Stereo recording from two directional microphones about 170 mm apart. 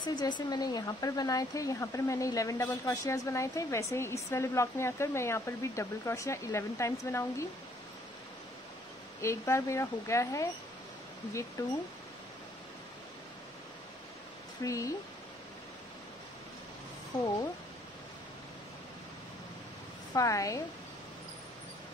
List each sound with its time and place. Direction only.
0.0 s speech: 25° left (ahead or behind)
9.2 s speech: 15° left (ahead or behind)
11.6 s a woman's voice: 20° left (ahead or behind)
14.6 s a woman's voice: 20° left (ahead or behind)
20.2 s a woman's voice: 20° left (ahead or behind)